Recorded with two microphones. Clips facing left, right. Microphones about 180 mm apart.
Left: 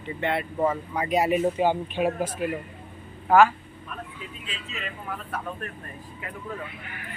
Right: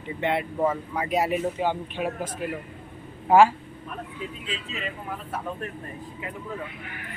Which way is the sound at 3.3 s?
30° right (ahead or behind).